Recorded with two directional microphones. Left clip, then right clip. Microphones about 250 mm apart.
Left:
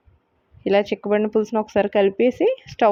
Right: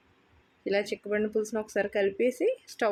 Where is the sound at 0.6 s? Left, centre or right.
Left.